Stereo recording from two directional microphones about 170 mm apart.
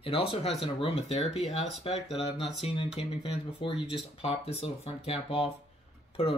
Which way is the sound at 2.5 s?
30° left (ahead or behind).